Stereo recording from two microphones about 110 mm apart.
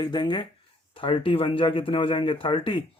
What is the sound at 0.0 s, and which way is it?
Speech, 40° left (ahead or behind).